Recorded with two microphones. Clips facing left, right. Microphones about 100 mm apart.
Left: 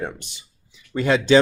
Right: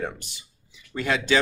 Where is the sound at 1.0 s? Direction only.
25° left (ahead or behind).